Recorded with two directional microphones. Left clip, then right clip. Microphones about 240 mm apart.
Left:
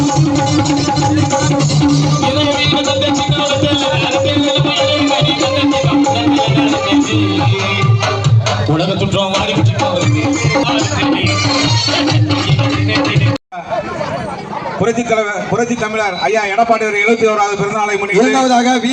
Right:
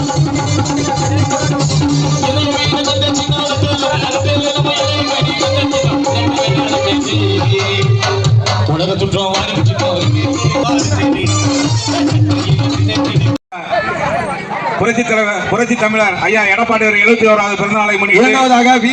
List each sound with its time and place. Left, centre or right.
1.8 s music: centre
4.4 s music: centre
10.5 s music: centre
15.1 s a sound: right
18.2 s a man's voice: right